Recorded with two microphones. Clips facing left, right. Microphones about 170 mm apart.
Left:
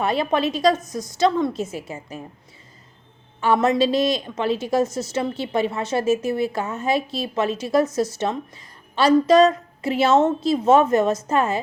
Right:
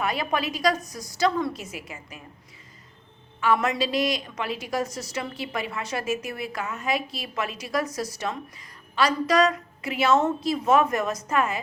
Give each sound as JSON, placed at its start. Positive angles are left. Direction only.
{"t": 0.0, "sound": "a woman's voice", "side_deg": 25}
{"t": 3.4, "sound": "a woman's voice", "side_deg": 25}